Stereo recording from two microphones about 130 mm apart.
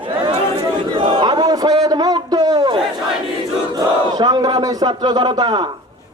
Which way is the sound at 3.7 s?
30° right (ahead or behind).